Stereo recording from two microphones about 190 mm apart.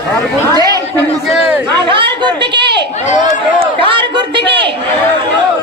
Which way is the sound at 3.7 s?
25° right (ahead or behind).